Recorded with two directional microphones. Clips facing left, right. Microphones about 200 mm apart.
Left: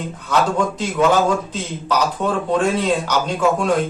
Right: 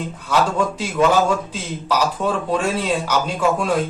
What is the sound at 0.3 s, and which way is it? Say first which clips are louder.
Speech: even; 10° right (ahead or behind).